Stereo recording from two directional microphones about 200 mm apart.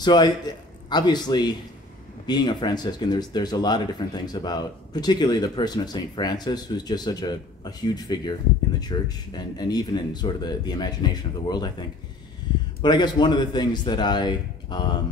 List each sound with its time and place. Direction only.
0.0 s a man's voice: 20° left (ahead or behind)
12.8 s speech: 20° left (ahead or behind)